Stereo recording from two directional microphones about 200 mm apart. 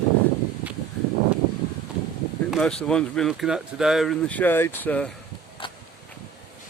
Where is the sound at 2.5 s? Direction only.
5° left (ahead or behind).